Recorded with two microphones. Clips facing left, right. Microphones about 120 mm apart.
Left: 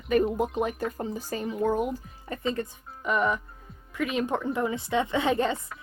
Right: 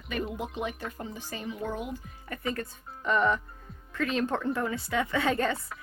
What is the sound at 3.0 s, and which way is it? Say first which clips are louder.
A woman's voice: even; 10° left (ahead or behind).